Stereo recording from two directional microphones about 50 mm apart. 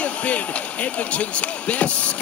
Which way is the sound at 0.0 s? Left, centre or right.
Left.